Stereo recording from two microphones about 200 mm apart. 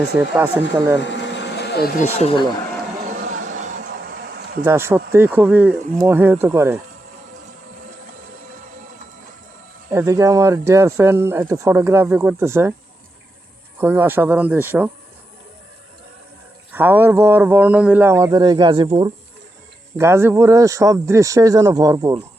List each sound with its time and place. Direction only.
0.3 s speech: 10° right (ahead or behind)
1.0 s a sound: 65° left (ahead or behind)
3.1 s a sound: 40° right (ahead or behind)
4.6 s speech: 10° right (ahead or behind)
9.9 s speech: 15° right (ahead or behind)
13.7 s speech: 10° right (ahead or behind)
16.7 s speech: 10° right (ahead or behind); by 19.1 s 25° right (ahead or behind)
20.0 s speech: 15° right (ahead or behind)